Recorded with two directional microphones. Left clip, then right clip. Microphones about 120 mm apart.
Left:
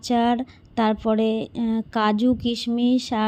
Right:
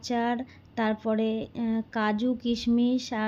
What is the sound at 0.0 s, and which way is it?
Speech, 40° left (ahead or behind).